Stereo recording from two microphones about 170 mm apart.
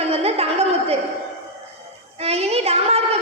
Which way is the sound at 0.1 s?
35° right (ahead or behind).